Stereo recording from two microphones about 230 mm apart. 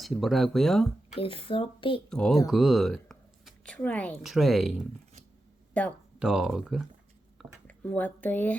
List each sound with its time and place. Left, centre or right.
0.0 s speech: centre
1.1 s speech: left
2.0 s speech: centre
5.7 s speech: centre